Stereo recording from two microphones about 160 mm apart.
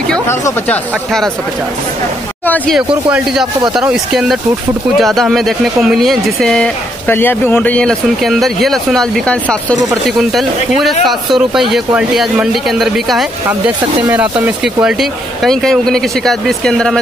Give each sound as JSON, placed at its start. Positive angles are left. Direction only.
{"t": 0.3, "sound": "speech", "side_deg": 15}
{"t": 2.4, "sound": "speech", "side_deg": 10}
{"t": 2.7, "sound": "speech", "side_deg": -5}